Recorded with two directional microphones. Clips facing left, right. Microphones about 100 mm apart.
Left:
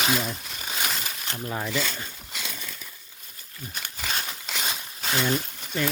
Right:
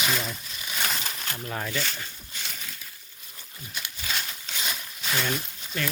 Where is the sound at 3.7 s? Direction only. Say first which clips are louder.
Left 2 dB; 45° left (ahead or behind).